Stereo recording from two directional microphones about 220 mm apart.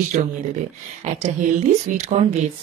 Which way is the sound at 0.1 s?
35° right (ahead or behind).